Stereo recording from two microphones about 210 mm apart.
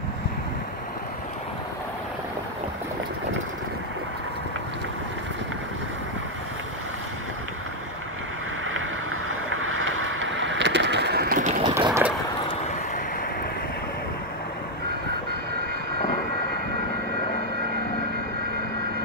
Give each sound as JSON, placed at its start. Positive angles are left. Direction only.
{"t": 9.3, "sound": "boat", "side_deg": -75}
{"t": 11.6, "sound": "boat", "side_deg": -15}